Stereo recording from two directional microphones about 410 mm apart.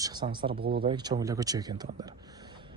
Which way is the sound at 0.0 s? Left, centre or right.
Centre.